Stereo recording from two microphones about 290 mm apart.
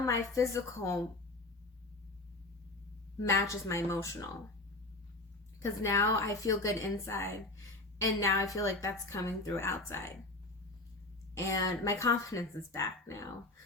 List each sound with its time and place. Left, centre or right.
0.0 s a woman's voice: centre
3.2 s a woman's voice: centre
5.8 s a woman's voice: centre
11.3 s a woman's voice: centre